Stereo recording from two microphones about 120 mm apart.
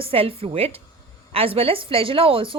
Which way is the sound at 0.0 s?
50° right (ahead or behind).